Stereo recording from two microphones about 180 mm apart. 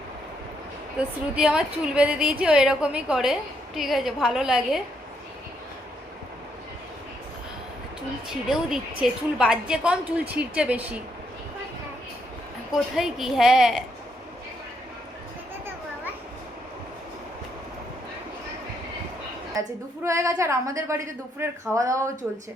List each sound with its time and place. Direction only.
0.9 s a woman's voice: 5° right (ahead or behind)
8.3 s a woman's voice: centre (ahead or behind)
12.7 s a woman's voice: centre (ahead or behind)
20.1 s a woman's voice: 15° right (ahead or behind)